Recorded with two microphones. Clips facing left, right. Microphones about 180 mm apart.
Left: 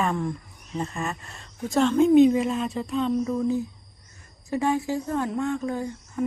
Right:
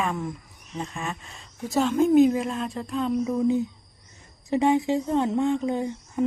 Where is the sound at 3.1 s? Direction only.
15° right (ahead or behind).